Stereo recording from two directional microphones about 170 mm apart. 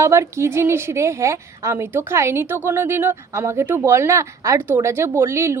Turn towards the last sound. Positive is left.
turn(degrees=-15)  # may be behind; listen again after turning